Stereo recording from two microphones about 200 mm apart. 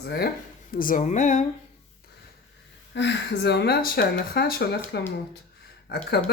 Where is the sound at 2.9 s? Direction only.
60° left (ahead or behind).